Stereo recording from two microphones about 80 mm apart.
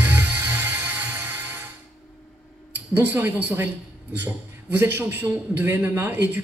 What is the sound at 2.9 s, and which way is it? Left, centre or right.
Speech, right.